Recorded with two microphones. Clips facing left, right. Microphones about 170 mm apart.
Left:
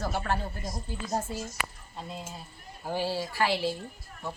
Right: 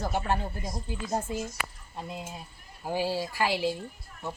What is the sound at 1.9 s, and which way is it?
Speech, 15° right (ahead or behind).